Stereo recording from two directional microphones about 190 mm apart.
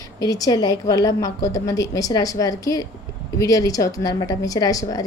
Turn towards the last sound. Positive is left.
turn(degrees=20)  # may be behind; listen again after turning